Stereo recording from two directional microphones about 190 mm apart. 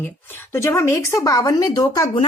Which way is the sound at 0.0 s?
10° left (ahead or behind).